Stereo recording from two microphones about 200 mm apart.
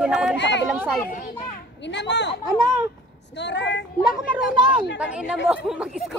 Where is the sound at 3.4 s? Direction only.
60° left (ahead or behind).